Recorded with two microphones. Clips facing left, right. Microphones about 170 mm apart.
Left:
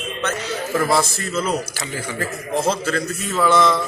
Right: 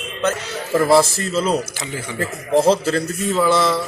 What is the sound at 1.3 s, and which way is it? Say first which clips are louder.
A man's voice: right 3 dB; 30° right (ahead or behind).